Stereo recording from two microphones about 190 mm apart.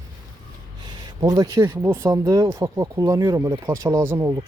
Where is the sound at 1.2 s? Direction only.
20° right (ahead or behind).